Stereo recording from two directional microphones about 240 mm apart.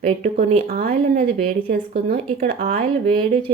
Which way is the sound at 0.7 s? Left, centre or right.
Right.